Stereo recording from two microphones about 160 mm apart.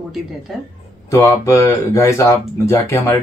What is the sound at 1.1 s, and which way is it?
Speech, 20° left (ahead or behind).